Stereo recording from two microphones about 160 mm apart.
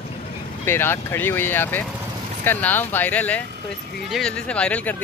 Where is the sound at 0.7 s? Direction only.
15° left (ahead or behind).